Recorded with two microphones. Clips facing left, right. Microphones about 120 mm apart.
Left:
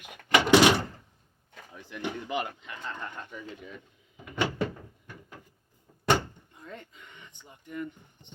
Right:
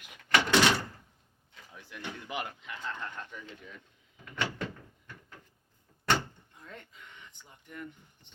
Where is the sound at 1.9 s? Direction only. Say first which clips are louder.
Left 8 dB; 15° left (ahead or behind).